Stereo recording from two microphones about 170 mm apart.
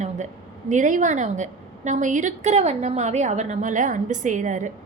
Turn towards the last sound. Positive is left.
turn(degrees=-45)  # may be behind; listen again after turning